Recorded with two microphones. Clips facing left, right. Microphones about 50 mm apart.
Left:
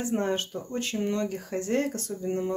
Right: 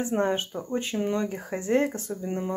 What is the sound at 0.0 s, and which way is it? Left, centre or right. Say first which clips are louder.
Speech: right 2 dB; right.